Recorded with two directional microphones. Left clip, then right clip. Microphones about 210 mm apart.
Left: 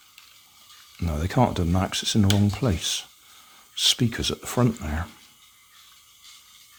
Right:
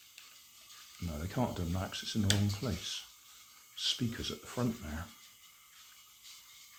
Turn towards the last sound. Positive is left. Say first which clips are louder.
# left 12 dB
turn(degrees=55)  # may be behind; listen again after turning